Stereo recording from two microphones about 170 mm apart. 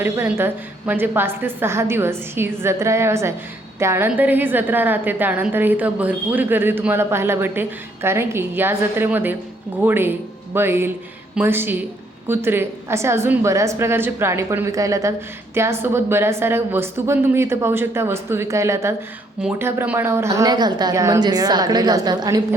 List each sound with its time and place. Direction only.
0.0 s a woman's voice: 15° right (ahead or behind)